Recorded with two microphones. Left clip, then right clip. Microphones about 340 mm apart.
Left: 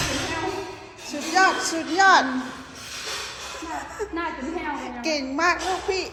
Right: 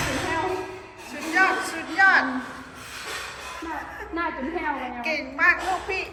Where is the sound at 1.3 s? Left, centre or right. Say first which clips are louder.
Left 2 dB; centre.